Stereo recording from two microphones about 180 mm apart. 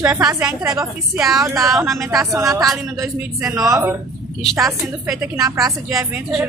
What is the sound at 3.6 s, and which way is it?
Speech, 20° right (ahead or behind).